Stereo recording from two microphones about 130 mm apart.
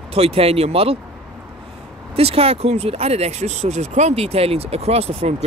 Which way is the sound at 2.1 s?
50° right (ahead or behind).